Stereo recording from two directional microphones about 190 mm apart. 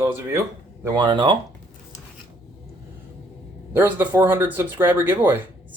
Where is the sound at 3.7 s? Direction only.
10° right (ahead or behind).